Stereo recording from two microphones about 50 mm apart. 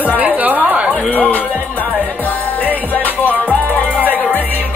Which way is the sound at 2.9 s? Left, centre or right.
Left.